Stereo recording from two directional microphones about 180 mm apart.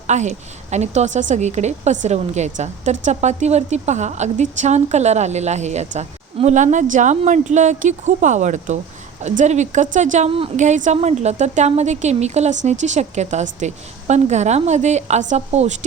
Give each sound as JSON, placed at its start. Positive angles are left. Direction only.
{"t": 0.1, "sound": "a woman's voice", "side_deg": -40}